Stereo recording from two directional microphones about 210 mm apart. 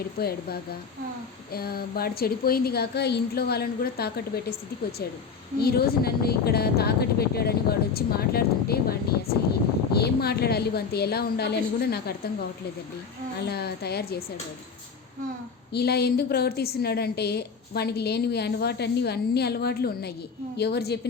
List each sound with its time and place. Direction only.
0.2 s a woman's voice: 50° left (ahead or behind)
5.5 s a woman's voice: 50° left (ahead or behind)
13.4 s a woman's voice: 50° left (ahead or behind)
15.7 s a woman's voice: 50° left (ahead or behind)